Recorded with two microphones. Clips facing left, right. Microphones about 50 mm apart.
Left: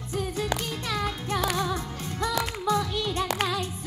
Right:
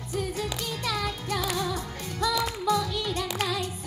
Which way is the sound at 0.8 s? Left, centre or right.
Left.